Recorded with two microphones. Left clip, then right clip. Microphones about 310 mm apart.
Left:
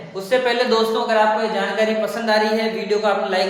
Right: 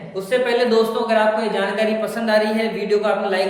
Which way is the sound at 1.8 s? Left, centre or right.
Centre.